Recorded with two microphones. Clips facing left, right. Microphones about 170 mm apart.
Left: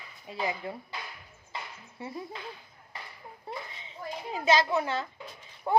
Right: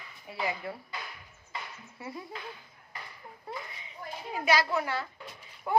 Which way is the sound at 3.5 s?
30° left (ahead or behind).